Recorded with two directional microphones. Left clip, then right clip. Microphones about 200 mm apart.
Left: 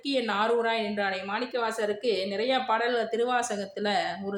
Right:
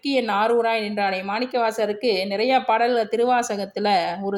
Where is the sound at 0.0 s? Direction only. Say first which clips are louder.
Right 6 dB; 30° right (ahead or behind).